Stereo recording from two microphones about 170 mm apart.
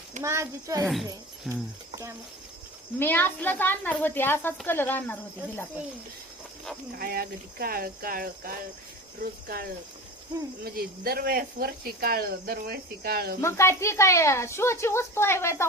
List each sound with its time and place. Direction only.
0.2 s a child's voice: 15° right (ahead or behind)
1.5 s speech: 5° right (ahead or behind)
3.0 s a woman's voice: 10° left (ahead or behind)
7.0 s speech: 60° right (ahead or behind)
13.4 s a woman's voice: 15° left (ahead or behind)